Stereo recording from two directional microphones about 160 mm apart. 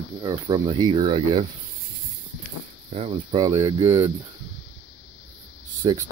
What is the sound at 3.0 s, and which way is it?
Speech, 35° right (ahead or behind).